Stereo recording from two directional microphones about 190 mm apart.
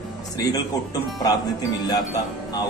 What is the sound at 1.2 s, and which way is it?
Speech, 20° left (ahead or behind).